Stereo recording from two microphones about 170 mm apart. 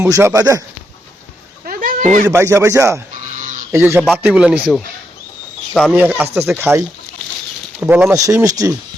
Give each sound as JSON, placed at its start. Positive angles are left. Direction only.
{"t": 0.0, "sound": "speech", "side_deg": -15}
{"t": 1.6, "sound": "a sound", "side_deg": -55}
{"t": 2.2, "sound": "speech", "side_deg": -15}
{"t": 5.9, "sound": "speech", "side_deg": -10}